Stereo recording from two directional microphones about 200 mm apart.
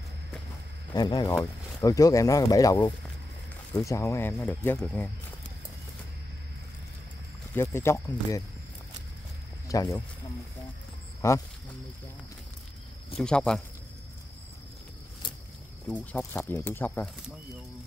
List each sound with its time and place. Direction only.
0.9 s speech: 20° left (ahead or behind)
7.5 s speech: 10° left (ahead or behind)
9.7 s speech: 15° left (ahead or behind)
11.1 s speech: 15° left (ahead or behind)
13.2 s speech: 5° left (ahead or behind)
15.9 s speech: 10° left (ahead or behind)